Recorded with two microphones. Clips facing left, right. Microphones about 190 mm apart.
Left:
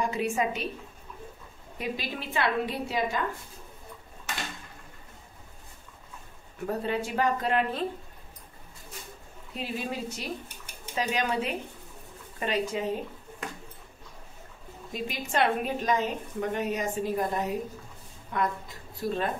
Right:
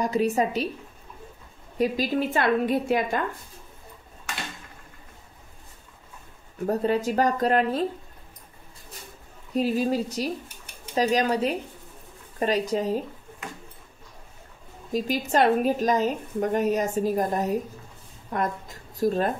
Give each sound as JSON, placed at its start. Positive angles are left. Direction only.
{"t": 0.0, "sound": "a woman's voice", "side_deg": -40}
{"t": 1.8, "sound": "a woman's voice", "side_deg": -40}
{"t": 6.6, "sound": "a woman's voice", "side_deg": -40}
{"t": 9.5, "sound": "a woman's voice", "side_deg": -40}
{"t": 14.9, "sound": "a woman's voice", "side_deg": -40}